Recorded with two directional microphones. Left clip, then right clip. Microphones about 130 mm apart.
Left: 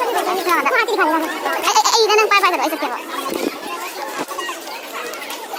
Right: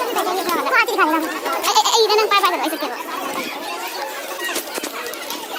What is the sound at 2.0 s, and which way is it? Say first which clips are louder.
Speech: left 2 dB; 30° left (ahead or behind).